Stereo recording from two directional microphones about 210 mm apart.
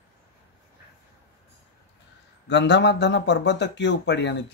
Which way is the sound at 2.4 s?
55° left (ahead or behind).